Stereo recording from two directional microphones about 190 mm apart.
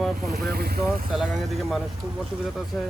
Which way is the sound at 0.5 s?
55° right (ahead or behind).